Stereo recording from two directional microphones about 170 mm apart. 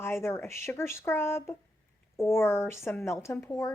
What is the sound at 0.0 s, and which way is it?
A woman's voice, 15° left (ahead or behind).